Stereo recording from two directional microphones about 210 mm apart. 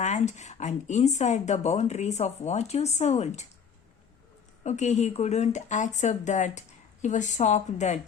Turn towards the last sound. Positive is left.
turn(degrees=35)  # may be behind; listen again after turning